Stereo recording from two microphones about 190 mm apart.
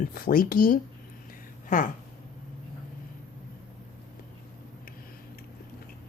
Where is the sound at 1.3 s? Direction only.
45° left (ahead or behind).